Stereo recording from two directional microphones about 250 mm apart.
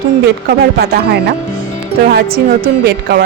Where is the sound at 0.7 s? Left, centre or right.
Right.